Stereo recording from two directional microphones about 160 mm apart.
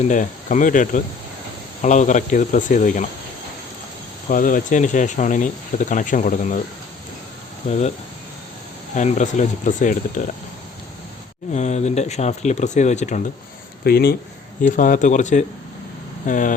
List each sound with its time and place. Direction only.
0.1 s speech: 55° left (ahead or behind)
4.3 s speech: 55° left (ahead or behind)
7.7 s speech: 45° left (ahead or behind)
9.0 s speech: 50° left (ahead or behind)
11.5 s speech: 45° left (ahead or behind)
13.8 s speech: 75° left (ahead or behind)
14.8 s speech: 55° left (ahead or behind)